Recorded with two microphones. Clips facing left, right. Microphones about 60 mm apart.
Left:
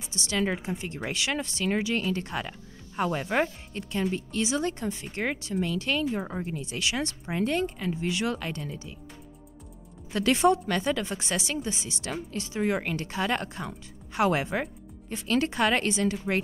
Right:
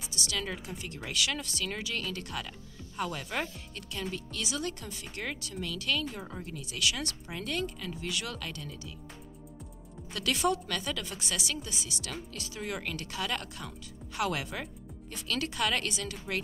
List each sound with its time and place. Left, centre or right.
0.0 s speech: left
10.1 s speech: left